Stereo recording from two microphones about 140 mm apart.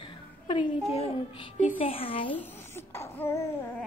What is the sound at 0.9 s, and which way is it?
Music, 50° left (ahead or behind).